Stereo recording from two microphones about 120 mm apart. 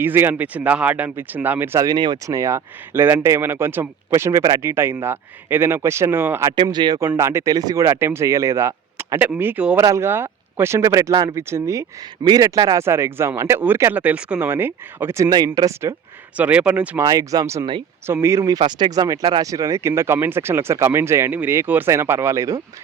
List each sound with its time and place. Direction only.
0.0 s speech: 15° right (ahead or behind)
6.6 s speech: 35° right (ahead or behind)
7.2 s speech: 25° right (ahead or behind)
16.4 s speech: 10° right (ahead or behind)
17.0 s speech: 30° right (ahead or behind)